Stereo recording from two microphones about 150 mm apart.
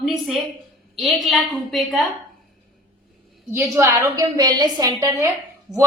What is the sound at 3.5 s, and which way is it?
A woman's voice, 15° right (ahead or behind).